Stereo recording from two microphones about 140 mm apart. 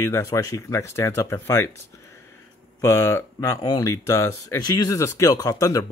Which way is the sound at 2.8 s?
20° left (ahead or behind).